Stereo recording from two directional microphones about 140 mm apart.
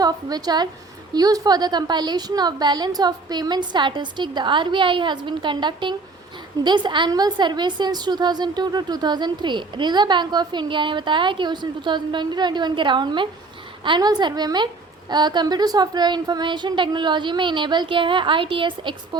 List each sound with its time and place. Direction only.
0.0 s a woman's voice: 30° right (ahead or behind)